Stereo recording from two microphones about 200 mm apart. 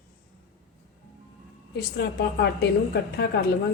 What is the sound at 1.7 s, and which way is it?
A woman's voice, 55° left (ahead or behind).